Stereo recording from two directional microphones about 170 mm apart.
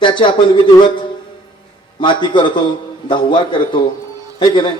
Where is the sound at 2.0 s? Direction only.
30° left (ahead or behind).